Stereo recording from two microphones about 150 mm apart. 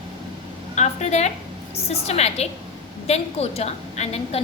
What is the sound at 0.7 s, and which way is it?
A woman's voice, 50° left (ahead or behind).